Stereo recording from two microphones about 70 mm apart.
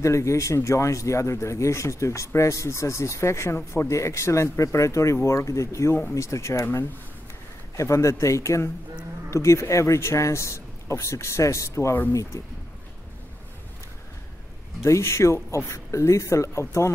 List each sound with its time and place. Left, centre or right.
0.0 s speech: left
14.8 s speech: left